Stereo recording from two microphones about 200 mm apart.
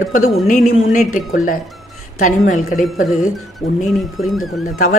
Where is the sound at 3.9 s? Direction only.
Centre (ahead or behind).